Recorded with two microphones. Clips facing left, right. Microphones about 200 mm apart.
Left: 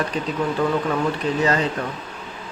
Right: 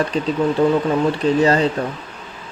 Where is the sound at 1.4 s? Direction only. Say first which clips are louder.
Right 4 dB; 30° right (ahead or behind).